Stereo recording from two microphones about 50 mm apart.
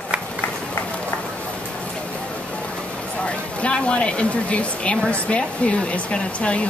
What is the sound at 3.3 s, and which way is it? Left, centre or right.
Speech, left.